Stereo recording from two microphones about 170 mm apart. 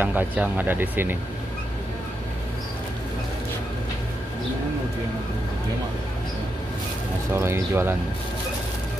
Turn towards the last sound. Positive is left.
turn(degrees=-15)  # may be behind; listen again after turning